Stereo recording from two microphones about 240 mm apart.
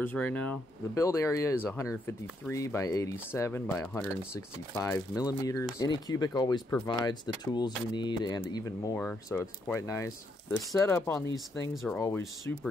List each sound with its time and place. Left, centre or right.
0.0 s speech: centre
11.7 s speech: centre
12.0 s speech: centre